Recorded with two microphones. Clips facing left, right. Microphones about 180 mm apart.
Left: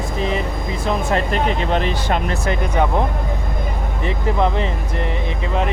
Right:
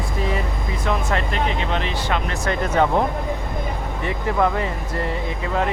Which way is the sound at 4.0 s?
25° left (ahead or behind).